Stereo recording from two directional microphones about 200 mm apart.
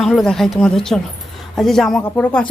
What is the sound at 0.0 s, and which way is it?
Speech, centre (ahead or behind).